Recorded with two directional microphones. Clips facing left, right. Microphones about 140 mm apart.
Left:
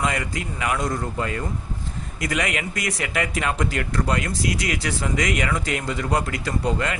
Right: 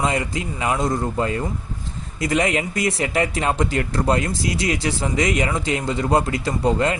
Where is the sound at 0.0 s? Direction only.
25° right (ahead or behind).